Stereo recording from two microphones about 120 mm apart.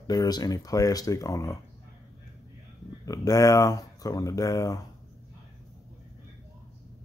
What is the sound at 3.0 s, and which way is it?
Speech, 30° left (ahead or behind).